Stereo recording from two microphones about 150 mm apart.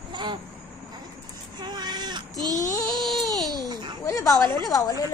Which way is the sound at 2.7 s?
25° left (ahead or behind).